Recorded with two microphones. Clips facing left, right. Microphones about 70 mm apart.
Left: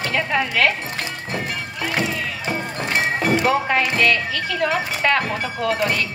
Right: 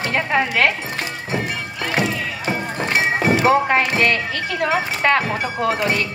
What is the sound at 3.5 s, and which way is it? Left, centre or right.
Speech, right.